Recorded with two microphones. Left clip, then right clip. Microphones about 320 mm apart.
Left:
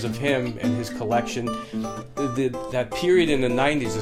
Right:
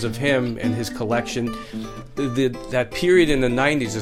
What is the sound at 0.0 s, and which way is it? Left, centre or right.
Speech, right.